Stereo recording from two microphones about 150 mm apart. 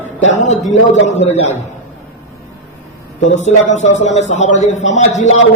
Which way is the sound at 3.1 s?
50° left (ahead or behind).